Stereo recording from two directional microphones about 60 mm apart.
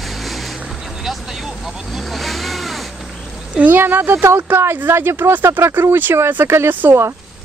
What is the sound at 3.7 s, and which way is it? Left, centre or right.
Speech, right.